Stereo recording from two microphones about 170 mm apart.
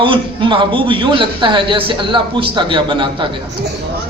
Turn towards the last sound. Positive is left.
turn(degrees=-30)  # may be behind; listen again after turning